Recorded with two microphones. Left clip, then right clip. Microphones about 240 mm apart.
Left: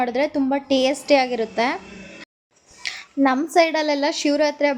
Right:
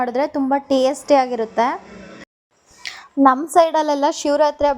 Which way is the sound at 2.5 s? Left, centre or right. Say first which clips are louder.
Left 2 dB; centre.